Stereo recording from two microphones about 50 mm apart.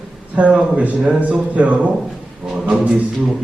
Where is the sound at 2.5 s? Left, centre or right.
Centre.